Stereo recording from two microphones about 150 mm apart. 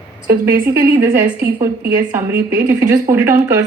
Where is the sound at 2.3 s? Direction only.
75° right (ahead or behind).